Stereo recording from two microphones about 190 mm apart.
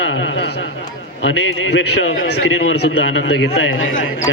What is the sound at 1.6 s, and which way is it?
A man's voice, 90° left.